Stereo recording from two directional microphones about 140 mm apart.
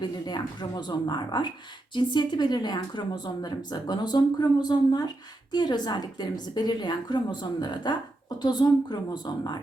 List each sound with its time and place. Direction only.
0.0 s speech: 30° left (ahead or behind)